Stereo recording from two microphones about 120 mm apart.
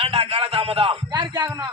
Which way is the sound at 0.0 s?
55° right (ahead or behind).